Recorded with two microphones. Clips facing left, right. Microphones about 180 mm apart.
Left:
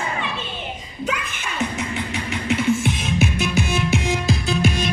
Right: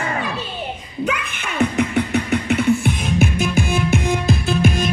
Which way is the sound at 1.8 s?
60° right (ahead or behind).